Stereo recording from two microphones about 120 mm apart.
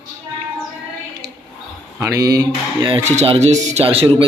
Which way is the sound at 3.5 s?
75° right (ahead or behind).